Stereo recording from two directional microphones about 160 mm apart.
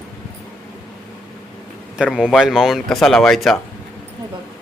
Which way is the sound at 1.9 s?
5° right (ahead or behind).